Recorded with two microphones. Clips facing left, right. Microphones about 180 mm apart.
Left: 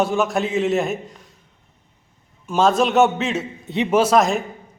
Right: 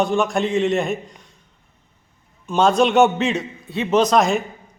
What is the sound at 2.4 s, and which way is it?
A man's voice, centre (ahead or behind).